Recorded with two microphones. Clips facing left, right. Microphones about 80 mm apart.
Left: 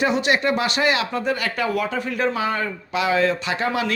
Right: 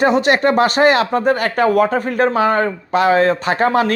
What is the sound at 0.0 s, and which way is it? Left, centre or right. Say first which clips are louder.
Speech: right 6 dB; right.